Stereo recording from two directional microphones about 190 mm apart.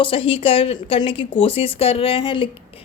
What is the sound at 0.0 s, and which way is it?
A woman's voice, 30° left (ahead or behind).